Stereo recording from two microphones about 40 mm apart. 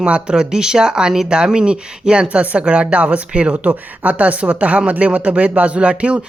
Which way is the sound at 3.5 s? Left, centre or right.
Right.